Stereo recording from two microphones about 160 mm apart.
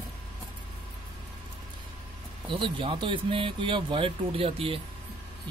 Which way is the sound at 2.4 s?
30° right (ahead or behind).